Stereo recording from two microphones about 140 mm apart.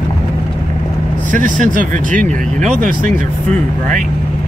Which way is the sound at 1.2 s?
65° right (ahead or behind).